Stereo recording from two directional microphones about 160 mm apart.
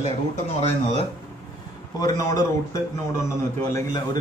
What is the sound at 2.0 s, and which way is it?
A man's voice, 25° left (ahead or behind).